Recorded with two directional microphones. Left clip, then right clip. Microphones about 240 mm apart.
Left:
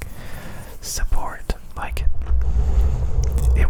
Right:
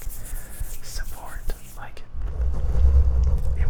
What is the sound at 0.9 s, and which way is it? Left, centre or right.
Whispering, left.